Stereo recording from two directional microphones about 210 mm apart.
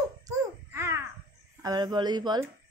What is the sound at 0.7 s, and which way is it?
Caw, 10° right (ahead or behind).